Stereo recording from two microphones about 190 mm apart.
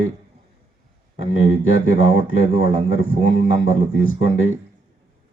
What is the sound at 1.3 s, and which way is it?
Speech, 90° left.